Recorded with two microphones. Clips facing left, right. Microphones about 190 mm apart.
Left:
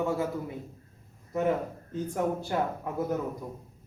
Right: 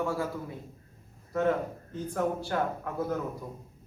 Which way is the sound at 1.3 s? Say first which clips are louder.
Even; 15° left (ahead or behind).